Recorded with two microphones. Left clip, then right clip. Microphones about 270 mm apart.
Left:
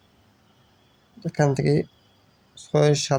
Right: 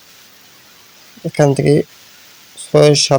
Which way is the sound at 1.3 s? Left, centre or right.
Right.